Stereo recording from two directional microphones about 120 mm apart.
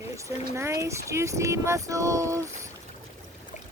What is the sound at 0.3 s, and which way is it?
Speech, 25° right (ahead or behind).